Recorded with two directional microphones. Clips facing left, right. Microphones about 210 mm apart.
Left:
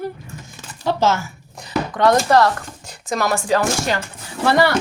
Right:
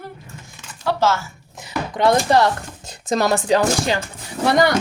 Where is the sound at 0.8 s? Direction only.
20° left (ahead or behind).